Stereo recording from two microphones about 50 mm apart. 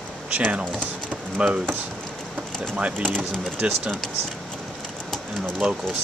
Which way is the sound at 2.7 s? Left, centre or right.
Right.